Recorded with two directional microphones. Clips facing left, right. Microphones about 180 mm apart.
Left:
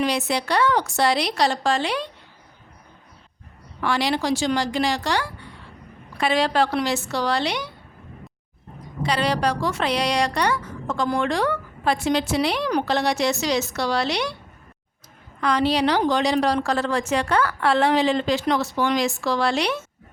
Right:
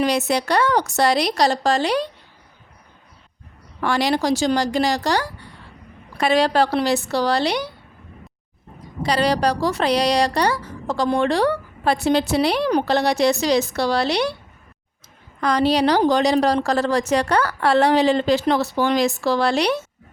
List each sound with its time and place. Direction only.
0.0 s a woman's voice: 45° right (ahead or behind)
3.8 s a woman's voice: 45° right (ahead or behind)
9.0 s a woman's voice: 40° right (ahead or behind)
15.4 s a woman's voice: 40° right (ahead or behind)